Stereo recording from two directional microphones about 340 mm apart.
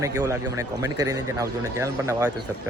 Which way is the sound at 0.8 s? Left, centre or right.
Centre.